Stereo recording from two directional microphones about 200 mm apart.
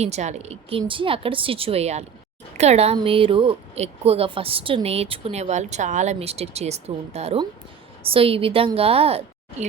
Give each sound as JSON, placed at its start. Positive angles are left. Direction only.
{"t": 0.0, "sound": "a woman's voice", "side_deg": -35}